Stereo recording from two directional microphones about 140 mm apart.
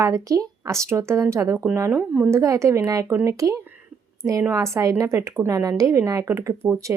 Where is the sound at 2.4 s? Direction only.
20° right (ahead or behind).